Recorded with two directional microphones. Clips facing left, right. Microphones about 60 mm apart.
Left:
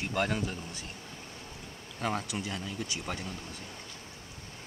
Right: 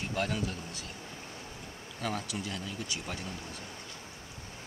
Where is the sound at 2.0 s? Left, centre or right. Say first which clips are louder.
Left 3 dB; left.